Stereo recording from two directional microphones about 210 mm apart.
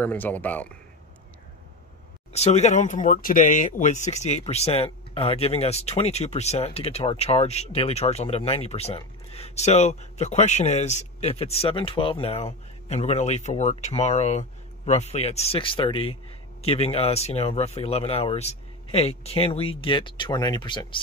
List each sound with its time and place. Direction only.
0.0 s speech: 10° left (ahead or behind)
2.3 s speech: 30° left (ahead or behind)